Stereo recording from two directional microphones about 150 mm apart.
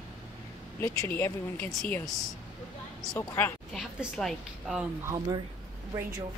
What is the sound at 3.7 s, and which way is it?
A woman's voice, centre (ahead or behind).